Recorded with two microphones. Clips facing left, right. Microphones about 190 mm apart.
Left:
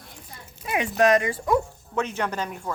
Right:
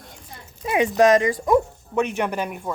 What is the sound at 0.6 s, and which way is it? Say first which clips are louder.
Speech: right 4 dB; 25° right (ahead or behind).